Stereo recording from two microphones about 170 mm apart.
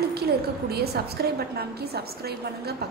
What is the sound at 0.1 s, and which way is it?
A woman's voice, 70° right (ahead or behind).